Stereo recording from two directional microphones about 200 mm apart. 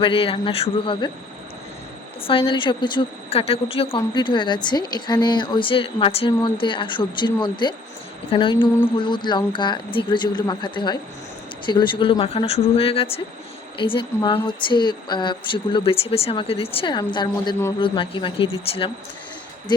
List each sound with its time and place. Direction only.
0.0 s speech: 25° left (ahead or behind)
2.2 s speech: 25° left (ahead or behind)